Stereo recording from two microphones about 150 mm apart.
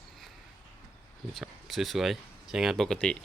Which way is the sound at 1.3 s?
Centre (ahead or behind).